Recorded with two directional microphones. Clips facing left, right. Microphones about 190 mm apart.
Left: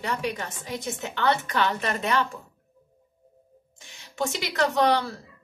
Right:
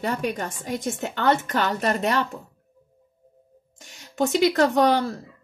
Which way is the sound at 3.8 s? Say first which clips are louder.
Right 5 dB; 45° right (ahead or behind).